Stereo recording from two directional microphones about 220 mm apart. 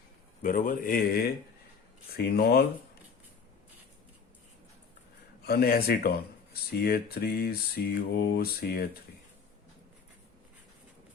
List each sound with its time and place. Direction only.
0.4 s a man's voice: 40° left (ahead or behind)
5.4 s speech: 45° left (ahead or behind)